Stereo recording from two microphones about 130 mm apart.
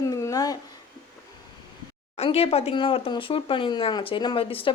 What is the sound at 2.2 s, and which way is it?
A woman's voice, 50° left (ahead or behind).